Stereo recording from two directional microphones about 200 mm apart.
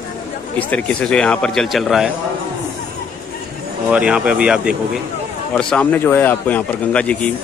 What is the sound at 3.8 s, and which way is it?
Speech, 5° right (ahead or behind).